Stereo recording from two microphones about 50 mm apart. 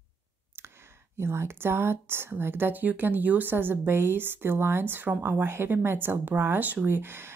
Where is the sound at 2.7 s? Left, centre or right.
Right.